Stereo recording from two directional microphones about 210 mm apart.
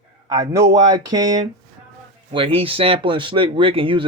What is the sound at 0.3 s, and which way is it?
Speech, 15° right (ahead or behind).